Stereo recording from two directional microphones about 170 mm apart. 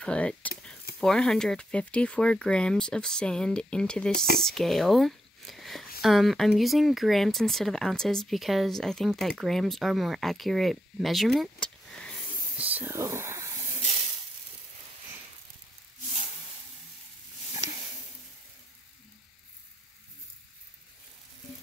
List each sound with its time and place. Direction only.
0.0 s speech: 5° left (ahead or behind)
12.5 s speech: 10° right (ahead or behind)